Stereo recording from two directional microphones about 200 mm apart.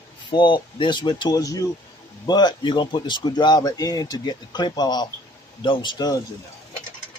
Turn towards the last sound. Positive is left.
turn(degrees=20)  # may be behind; listen again after turning